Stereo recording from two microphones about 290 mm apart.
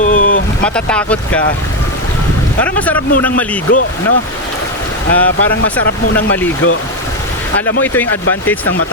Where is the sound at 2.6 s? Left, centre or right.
Centre.